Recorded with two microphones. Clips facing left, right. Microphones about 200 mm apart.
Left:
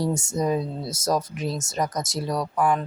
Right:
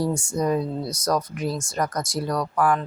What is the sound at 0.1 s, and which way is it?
Speech, 20° left (ahead or behind).